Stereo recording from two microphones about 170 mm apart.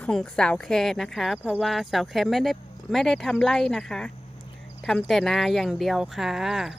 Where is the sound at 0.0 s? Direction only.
5° left (ahead or behind).